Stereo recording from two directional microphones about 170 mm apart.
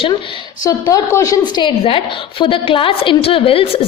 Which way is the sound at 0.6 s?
20° left (ahead or behind).